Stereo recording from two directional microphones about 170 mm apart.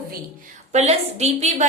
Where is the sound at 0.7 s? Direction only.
40° right (ahead or behind).